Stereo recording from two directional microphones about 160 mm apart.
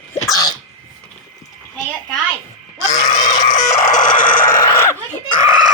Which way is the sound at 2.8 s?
50° left (ahead or behind).